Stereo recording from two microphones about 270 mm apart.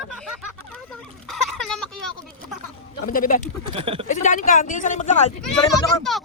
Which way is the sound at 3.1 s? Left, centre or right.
Left.